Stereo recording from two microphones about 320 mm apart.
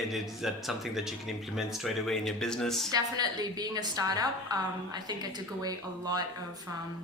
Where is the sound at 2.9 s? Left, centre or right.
Centre.